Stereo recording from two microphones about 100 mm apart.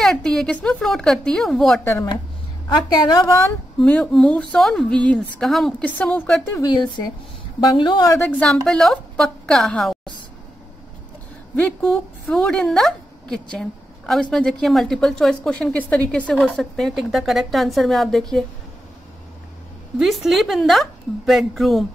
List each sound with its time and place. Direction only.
0.0 s a woman's voice: 5° left (ahead or behind)
2.7 s a woman's voice: 45° left (ahead or behind)
3.8 s a woman's voice: 10° left (ahead or behind)
6.6 s a woman's voice: 45° left (ahead or behind)
8.2 s a woman's voice: 10° left (ahead or behind)
11.9 s a woman's voice: 10° left (ahead or behind)
16.3 s a woman's voice: centre (ahead or behind)
20.0 s a woman's voice: centre (ahead or behind)